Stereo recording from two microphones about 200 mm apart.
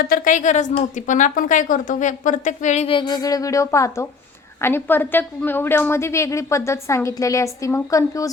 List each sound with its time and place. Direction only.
0.0 s a woman's voice: 45° left (ahead or behind); by 8.3 s 15° left (ahead or behind)